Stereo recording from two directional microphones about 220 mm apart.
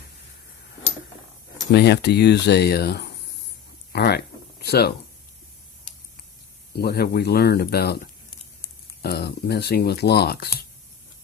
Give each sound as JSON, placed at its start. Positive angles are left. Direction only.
{"t": 1.7, "sound": "speech", "side_deg": 50}
{"t": 3.9, "sound": "a sound", "side_deg": 50}
{"t": 6.7, "sound": "speech", "side_deg": 45}